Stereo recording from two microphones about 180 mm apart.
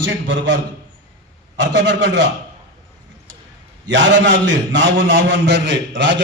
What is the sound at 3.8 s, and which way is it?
A man's voice, 85° right.